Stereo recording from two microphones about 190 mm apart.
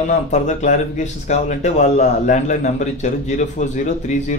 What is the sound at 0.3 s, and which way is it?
Speech, 40° left (ahead or behind).